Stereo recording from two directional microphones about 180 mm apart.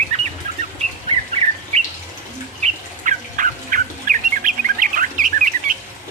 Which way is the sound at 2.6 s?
45° right (ahead or behind).